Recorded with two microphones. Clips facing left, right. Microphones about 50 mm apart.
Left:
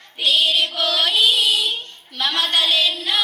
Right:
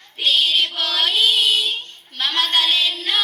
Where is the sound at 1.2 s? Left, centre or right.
Right.